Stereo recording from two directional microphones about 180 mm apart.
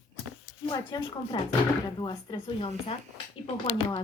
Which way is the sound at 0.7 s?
25° left (ahead or behind).